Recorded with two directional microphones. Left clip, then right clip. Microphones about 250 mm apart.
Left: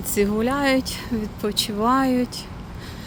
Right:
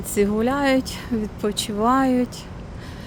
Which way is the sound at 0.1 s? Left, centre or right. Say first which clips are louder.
Right 1 dB; centre.